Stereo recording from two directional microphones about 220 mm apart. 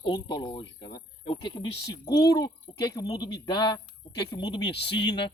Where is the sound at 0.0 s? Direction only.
20° left (ahead or behind).